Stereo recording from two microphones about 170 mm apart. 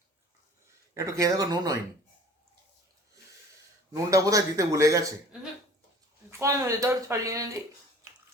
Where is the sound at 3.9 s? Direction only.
20° right (ahead or behind).